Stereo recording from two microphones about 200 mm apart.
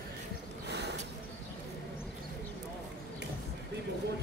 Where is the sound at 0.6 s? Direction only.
55° right (ahead or behind).